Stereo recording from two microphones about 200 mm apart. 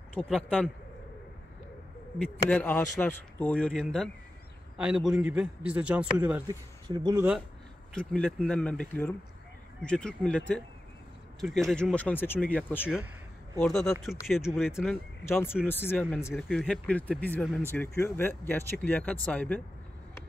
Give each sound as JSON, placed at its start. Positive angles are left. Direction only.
{"t": 0.1, "sound": "a man's voice", "side_deg": 5}
{"t": 2.5, "sound": "a man's voice", "side_deg": 10}
{"t": 6.9, "sound": "speech", "side_deg": -20}
{"t": 7.2, "sound": "a man's voice", "side_deg": -5}
{"t": 7.9, "sound": "a man's voice", "side_deg": 5}
{"t": 15.2, "sound": "a man's voice", "side_deg": 10}